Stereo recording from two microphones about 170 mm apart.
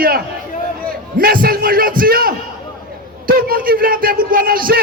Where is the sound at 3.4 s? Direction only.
60° right (ahead or behind).